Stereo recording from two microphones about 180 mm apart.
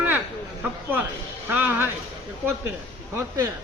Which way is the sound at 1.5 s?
10° right (ahead or behind).